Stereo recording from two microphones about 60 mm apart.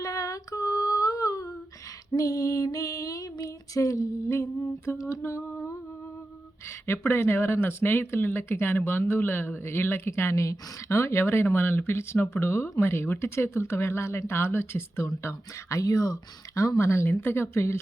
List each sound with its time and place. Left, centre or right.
0.0 s female singing: left
6.8 s speech: left